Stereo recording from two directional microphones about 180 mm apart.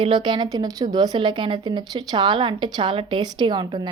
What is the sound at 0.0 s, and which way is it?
A woman's voice, 25° right (ahead or behind).